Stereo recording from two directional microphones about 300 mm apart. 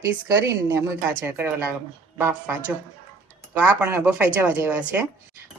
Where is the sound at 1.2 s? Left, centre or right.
Centre.